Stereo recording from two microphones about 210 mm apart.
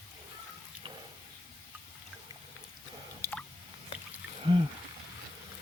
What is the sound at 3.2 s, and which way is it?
Drip, 10° left (ahead or behind).